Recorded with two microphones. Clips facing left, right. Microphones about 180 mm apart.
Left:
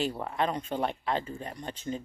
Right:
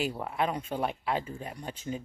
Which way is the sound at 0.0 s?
5° right (ahead or behind).